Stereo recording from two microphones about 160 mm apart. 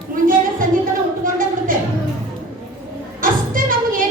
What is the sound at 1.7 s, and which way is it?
Music, 60° right (ahead or behind).